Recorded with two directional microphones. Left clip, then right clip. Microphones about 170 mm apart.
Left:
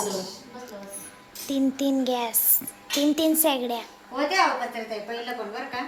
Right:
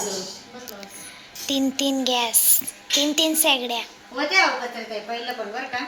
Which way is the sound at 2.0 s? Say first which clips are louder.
Right 5 dB; 15° left (ahead or behind).